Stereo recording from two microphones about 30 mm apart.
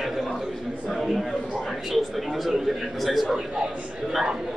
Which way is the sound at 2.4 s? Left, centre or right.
Centre.